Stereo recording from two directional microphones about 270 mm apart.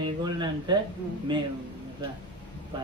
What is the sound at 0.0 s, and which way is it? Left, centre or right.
Speech, centre.